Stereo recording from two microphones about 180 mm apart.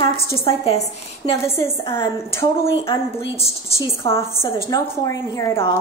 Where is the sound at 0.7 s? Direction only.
30° left (ahead or behind).